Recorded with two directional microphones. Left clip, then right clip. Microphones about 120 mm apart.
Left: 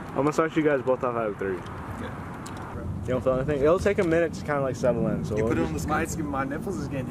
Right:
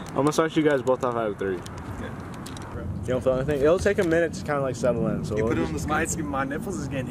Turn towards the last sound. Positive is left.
turn(degrees=-10)  # may be behind; listen again after turning